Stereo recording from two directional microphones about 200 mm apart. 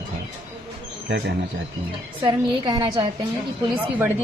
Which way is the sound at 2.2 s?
20° right (ahead or behind).